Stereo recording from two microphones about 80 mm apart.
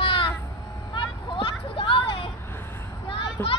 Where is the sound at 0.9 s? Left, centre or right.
Left.